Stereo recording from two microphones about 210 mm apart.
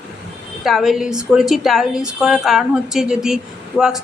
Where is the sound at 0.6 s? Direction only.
Centre (ahead or behind).